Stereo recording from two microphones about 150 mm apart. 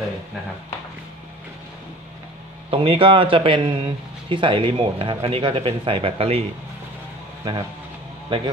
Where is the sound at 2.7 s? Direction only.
35° right (ahead or behind).